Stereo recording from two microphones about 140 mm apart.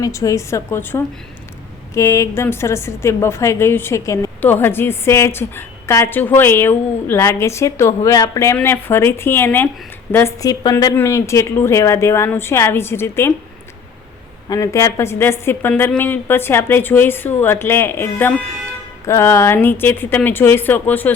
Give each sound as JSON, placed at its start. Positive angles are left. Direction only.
{"t": 0.0, "sound": "a woman's voice", "side_deg": 20}
{"t": 14.5, "sound": "a woman's voice", "side_deg": 25}